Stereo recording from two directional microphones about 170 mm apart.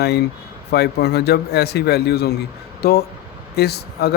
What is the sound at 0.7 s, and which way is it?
Speech, 75° left (ahead or behind).